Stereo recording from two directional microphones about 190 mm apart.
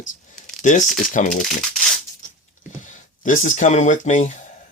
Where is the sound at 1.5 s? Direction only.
Centre (ahead or behind).